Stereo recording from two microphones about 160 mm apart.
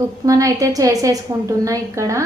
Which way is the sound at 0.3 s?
20° right (ahead or behind).